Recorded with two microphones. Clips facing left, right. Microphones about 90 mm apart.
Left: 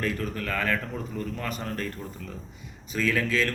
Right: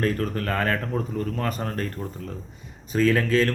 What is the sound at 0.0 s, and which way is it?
Speech, 40° right (ahead or behind).